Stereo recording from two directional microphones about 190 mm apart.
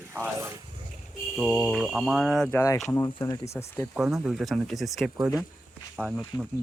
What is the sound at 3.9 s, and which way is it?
Speech, centre (ahead or behind).